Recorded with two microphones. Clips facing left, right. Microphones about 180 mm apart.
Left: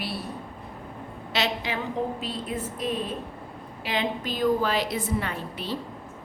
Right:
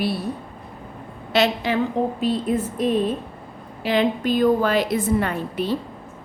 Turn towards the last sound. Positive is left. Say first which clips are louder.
# right 8 dB
turn(degrees=-50)  # may be behind; listen again after turning